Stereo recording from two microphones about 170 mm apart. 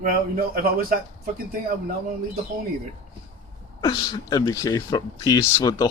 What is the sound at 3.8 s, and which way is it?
Speech, 20° left (ahead or behind).